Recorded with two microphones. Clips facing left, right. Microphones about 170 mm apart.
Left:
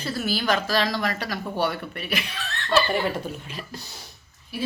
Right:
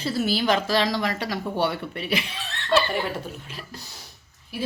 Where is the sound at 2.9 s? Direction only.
Centre (ahead or behind).